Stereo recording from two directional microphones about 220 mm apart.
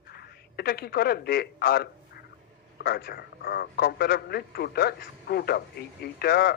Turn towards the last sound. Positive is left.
turn(degrees=45)  # may be behind; listen again after turning